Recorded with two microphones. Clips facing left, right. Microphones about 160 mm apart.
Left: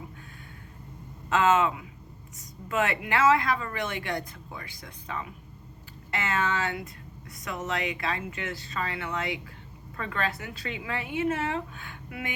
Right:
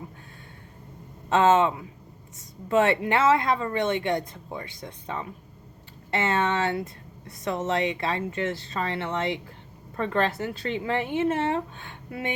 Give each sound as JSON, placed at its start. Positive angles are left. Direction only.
{"t": 1.3, "sound": "a woman's voice", "side_deg": -30}